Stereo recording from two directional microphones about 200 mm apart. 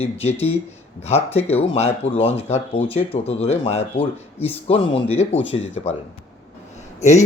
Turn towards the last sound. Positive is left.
turn(degrees=35)  # may be behind; listen again after turning